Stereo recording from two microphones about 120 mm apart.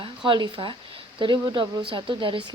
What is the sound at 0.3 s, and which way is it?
Speech, 45° right (ahead or behind).